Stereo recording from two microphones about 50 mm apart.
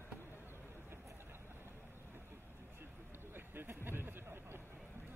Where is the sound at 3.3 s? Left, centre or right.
Right.